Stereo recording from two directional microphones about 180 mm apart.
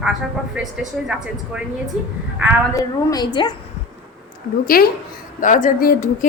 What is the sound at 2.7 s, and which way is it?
Speech, 20° left (ahead or behind).